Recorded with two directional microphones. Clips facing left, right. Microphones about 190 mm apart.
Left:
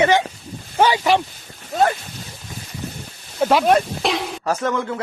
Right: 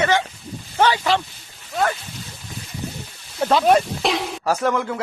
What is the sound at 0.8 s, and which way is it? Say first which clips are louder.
Speech: left 2 dB; 15° left (ahead or behind).